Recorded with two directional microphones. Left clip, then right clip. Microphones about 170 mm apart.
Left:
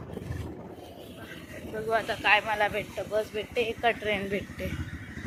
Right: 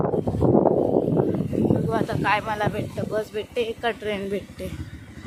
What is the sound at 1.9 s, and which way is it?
Speech, 40° right (ahead or behind).